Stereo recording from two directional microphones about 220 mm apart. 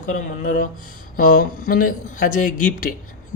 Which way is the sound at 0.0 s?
40° left (ahead or behind).